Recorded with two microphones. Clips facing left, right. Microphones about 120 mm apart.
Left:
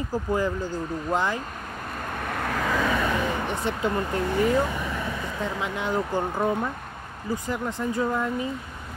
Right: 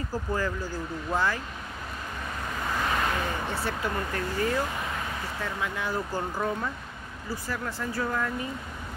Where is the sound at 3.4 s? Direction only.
20° left (ahead or behind).